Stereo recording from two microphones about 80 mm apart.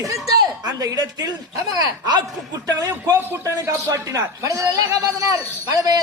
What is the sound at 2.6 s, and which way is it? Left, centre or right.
A man's voice, right.